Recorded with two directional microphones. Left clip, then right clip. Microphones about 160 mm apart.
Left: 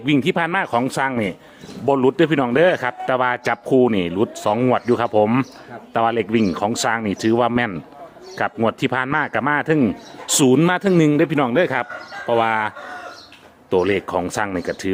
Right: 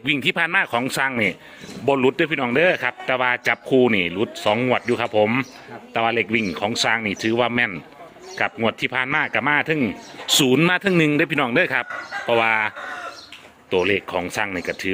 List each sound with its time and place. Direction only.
0.0 s speech: 20° left (ahead or behind)
1.8 s a man's voice: 30° left (ahead or behind)
10.4 s speech: 25° left (ahead or behind)
13.7 s a man's voice: 35° left (ahead or behind)